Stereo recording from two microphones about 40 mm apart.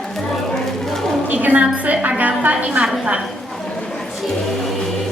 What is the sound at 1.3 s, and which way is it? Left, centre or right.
A woman's voice, right.